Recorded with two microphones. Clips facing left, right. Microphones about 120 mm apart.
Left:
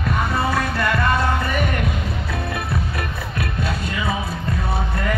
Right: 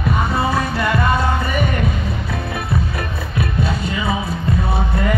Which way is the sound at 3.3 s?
Centre (ahead or behind).